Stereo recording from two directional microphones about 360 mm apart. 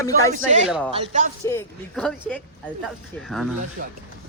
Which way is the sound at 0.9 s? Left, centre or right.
Centre.